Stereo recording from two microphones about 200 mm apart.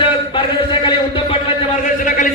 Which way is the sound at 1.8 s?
40° left (ahead or behind).